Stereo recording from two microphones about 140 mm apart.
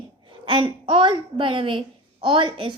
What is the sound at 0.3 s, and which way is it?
A woman's voice, 35° right (ahead or behind).